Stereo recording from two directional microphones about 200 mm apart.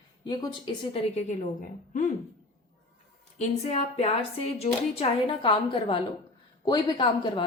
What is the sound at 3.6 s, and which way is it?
Speech, 35° left (ahead or behind).